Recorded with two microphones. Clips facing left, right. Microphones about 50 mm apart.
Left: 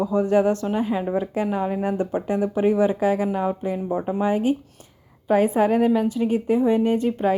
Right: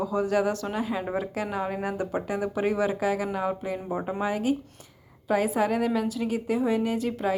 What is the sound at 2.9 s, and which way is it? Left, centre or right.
Speech, left.